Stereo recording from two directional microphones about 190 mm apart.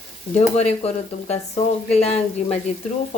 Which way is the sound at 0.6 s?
35° left (ahead or behind).